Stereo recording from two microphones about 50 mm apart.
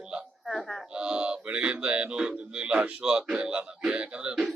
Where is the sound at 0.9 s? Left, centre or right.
Centre.